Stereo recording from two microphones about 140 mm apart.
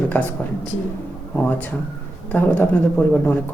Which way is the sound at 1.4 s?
10° left (ahead or behind).